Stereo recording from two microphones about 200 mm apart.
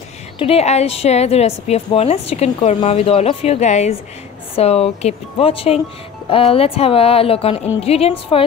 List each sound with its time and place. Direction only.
0.4 s a woman's voice: 30° left (ahead or behind)